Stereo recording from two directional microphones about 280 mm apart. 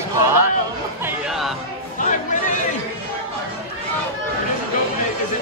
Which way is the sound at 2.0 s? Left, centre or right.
Left.